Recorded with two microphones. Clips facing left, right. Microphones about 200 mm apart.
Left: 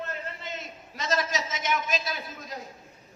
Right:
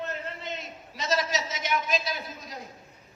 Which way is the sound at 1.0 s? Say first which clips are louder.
Right 1 dB; 50° left (ahead or behind).